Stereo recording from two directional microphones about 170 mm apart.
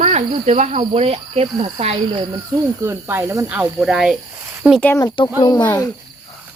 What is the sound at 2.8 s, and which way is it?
Speech, 15° right (ahead or behind).